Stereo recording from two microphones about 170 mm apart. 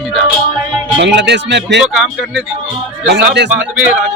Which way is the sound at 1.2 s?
90° right.